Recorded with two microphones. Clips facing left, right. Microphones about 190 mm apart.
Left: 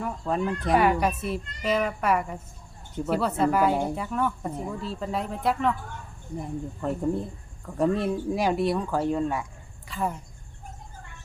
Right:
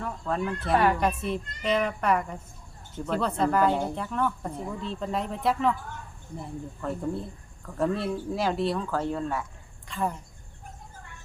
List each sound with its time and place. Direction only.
0.0 s speech: 15° left (ahead or behind)
6.4 s speech: 15° left (ahead or behind)